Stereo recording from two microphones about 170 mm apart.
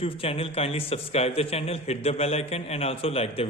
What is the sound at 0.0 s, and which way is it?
A man's voice, 35° left (ahead or behind).